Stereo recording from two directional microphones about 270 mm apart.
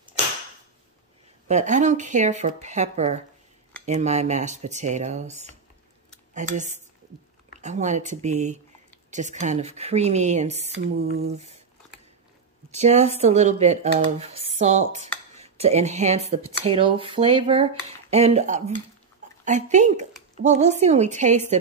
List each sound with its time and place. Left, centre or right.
1.5 s speech: right
11.0 s a sound: right
12.7 s speech: right